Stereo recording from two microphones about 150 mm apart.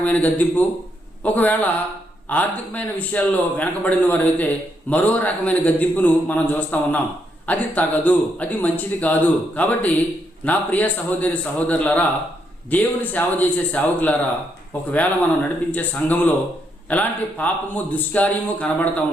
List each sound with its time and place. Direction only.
0.0 s a man's voice: 10° left (ahead or behind)